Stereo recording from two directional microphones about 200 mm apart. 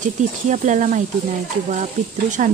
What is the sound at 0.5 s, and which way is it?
Speech, 40° right (ahead or behind).